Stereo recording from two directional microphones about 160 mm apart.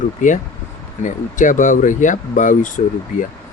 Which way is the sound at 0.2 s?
50° left (ahead or behind).